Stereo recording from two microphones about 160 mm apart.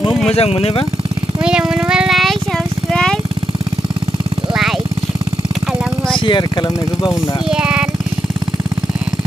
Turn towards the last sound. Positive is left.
turn(degrees=-5)  # may be behind; listen again after turning